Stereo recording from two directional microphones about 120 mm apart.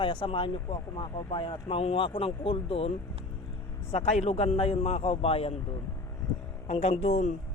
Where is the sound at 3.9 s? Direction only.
65° left (ahead or behind).